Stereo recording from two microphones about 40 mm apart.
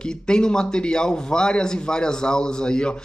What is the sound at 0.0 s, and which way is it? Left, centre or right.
A man's voice, left.